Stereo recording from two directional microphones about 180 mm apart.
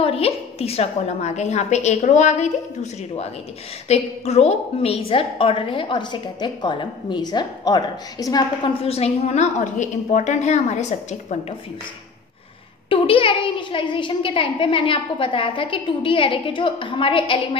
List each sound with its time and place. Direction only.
0.0 s a woman's voice: 35° left (ahead or behind)
8.8 s a woman's voice: 35° left (ahead or behind)
12.9 s a woman's voice: 30° left (ahead or behind)